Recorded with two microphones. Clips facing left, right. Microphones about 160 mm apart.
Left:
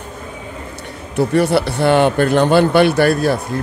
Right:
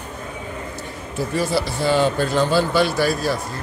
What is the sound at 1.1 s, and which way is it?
Speech, 65° left (ahead or behind).